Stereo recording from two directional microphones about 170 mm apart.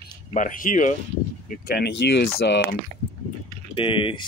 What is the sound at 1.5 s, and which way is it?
Speech, 65° left (ahead or behind).